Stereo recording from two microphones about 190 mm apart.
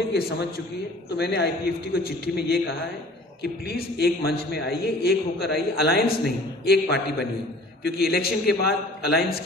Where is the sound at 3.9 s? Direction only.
55° left (ahead or behind).